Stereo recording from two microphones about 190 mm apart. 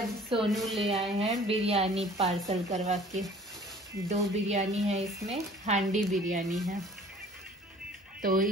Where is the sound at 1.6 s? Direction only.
35° right (ahead or behind).